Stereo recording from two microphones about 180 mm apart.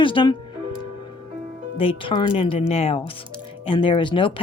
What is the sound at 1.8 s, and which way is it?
Speech, 30° left (ahead or behind).